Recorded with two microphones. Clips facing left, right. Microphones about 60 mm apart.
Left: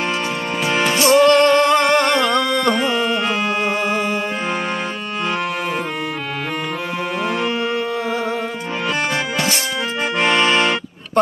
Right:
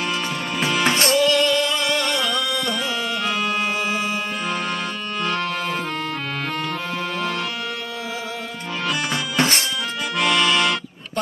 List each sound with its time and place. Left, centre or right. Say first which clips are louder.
0.6 s music: left 2 dB; left
0.8 s music: left 4 dB; right
1.1 s music: left 10 dB; left
10.1 s music: left 3 dB; left